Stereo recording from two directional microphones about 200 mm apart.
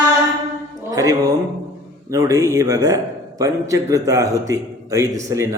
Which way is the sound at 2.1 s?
15° right (ahead or behind).